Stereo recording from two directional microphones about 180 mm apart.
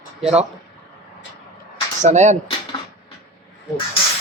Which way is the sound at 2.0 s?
40° right (ahead or behind).